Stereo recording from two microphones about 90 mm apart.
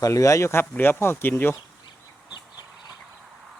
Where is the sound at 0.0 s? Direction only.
40° left (ahead or behind); by 1.5 s 25° left (ahead or behind).